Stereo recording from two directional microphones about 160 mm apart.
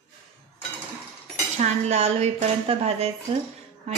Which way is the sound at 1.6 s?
45° right (ahead or behind).